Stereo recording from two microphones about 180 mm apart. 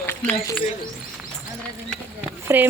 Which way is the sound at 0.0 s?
15° left (ahead or behind).